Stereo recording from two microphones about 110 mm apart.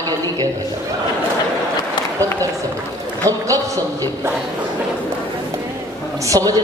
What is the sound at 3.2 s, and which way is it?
A man's voice, 30° right (ahead or behind).